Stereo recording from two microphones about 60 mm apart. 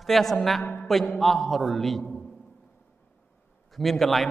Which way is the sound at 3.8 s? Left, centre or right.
Centre.